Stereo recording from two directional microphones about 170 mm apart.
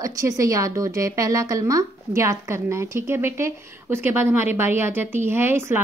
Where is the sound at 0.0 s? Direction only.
20° right (ahead or behind).